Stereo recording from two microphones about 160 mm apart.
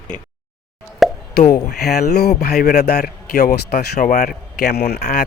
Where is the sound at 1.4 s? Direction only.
90° left.